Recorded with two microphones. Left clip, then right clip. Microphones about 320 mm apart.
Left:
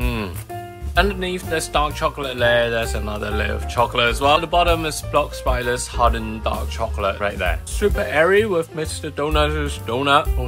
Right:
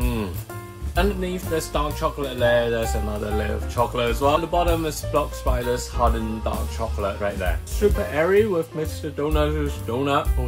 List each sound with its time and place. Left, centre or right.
0.0 s music: centre
0.9 s speech: centre